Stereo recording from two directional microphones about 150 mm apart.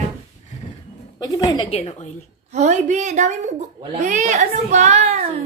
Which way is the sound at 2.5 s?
50° right (ahead or behind).